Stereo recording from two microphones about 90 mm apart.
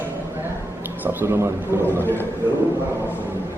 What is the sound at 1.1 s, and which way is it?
Speech, 25° right (ahead or behind).